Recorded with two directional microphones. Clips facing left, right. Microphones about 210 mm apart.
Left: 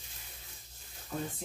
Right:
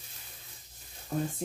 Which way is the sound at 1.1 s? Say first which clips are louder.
Right 5 dB; 45° right (ahead or behind).